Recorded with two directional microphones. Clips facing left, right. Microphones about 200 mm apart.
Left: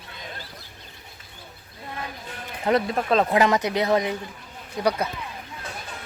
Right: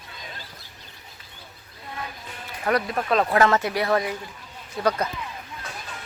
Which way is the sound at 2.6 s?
25° left (ahead or behind).